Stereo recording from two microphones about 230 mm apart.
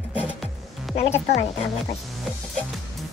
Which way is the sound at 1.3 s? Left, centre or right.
Left.